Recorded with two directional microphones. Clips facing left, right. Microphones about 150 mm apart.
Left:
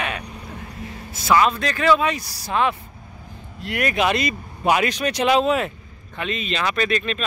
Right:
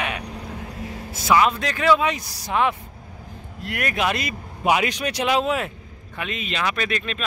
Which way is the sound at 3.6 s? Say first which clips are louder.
Left 3 dB; centre (ahead or behind).